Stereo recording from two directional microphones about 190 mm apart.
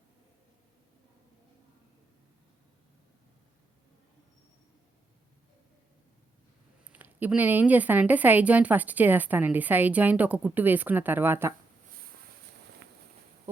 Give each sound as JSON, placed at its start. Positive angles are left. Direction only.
{"t": 6.9, "sound": "speech", "side_deg": -10}
{"t": 12.8, "sound": "walk", "side_deg": -65}